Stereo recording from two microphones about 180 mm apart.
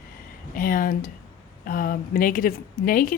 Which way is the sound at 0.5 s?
50° left (ahead or behind).